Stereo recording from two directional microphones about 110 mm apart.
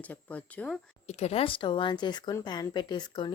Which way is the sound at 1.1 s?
75° left (ahead or behind).